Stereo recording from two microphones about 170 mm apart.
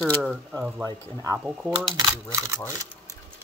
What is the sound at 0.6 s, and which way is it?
Speech, 10° right (ahead or behind).